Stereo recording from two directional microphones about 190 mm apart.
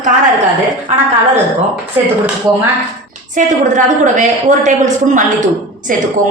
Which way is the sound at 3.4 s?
40° right (ahead or behind).